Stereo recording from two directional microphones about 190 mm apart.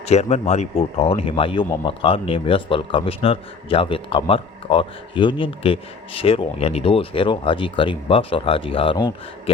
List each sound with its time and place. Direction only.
0.0 s speech: 35° left (ahead or behind)